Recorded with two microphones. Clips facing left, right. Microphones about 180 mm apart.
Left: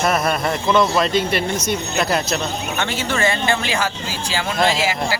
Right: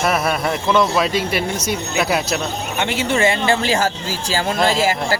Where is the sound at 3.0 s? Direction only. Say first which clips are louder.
Right 3 dB; 25° right (ahead or behind).